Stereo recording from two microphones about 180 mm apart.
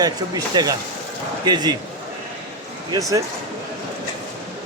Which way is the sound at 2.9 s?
20° right (ahead or behind).